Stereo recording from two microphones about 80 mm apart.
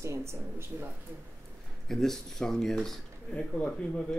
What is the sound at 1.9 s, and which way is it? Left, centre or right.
Speech, centre.